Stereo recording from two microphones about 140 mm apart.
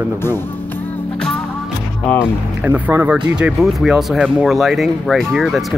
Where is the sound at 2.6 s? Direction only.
10° right (ahead or behind).